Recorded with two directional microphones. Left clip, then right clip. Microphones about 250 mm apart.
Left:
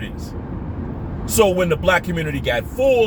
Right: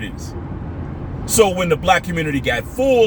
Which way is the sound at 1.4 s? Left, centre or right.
Centre.